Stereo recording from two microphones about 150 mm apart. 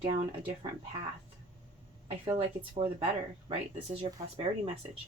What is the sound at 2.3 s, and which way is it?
Speech, 35° right (ahead or behind).